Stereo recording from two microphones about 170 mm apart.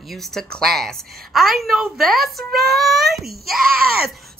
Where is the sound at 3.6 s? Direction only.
60° right (ahead or behind).